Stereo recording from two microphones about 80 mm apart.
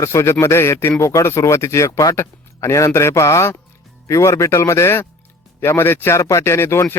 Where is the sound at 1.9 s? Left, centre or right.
Left.